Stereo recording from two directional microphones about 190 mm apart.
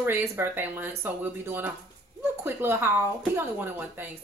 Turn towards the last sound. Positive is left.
turn(degrees=-10)  # may be behind; listen again after turning